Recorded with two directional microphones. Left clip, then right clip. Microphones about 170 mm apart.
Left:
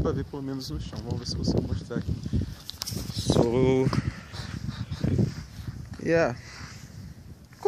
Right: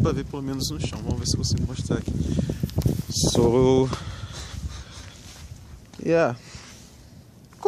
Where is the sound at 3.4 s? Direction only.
30° right (ahead or behind).